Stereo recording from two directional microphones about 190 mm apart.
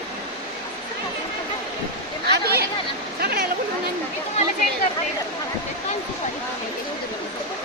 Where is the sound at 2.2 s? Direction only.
55° right (ahead or behind).